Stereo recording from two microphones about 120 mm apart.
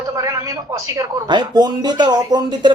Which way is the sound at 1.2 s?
35° right (ahead or behind).